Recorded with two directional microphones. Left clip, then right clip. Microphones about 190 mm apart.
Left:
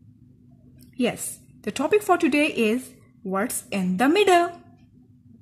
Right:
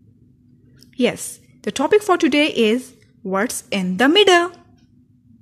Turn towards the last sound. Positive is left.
turn(degrees=-30)  # may be behind; listen again after turning